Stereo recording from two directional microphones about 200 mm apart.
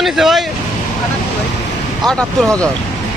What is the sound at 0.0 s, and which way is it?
Speech, centre (ahead or behind).